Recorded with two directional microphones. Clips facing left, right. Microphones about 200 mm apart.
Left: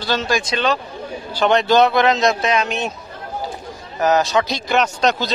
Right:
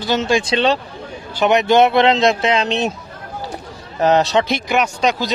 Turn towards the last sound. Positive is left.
turn(degrees=-10)  # may be behind; listen again after turning